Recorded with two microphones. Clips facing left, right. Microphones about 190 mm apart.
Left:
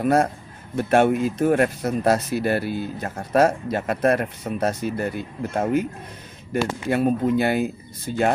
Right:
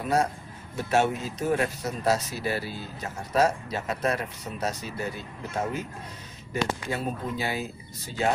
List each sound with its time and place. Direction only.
0.0 s a man's voice: 55° left (ahead or behind)
6.9 s speech: 60° left (ahead or behind)